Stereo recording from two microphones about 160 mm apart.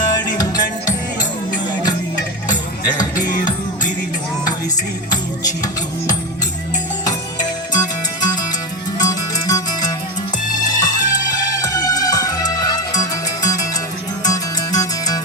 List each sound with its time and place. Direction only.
0.1 s music: 25° left (ahead or behind)
2.8 s music: 25° left (ahead or behind)
7.0 s music: 25° left (ahead or behind)
9.0 s zither: 25° left (ahead or behind)
10.6 s music: 25° left (ahead or behind)
11.0 s music: 55° left (ahead or behind)
11.3 s music: 20° left (ahead or behind)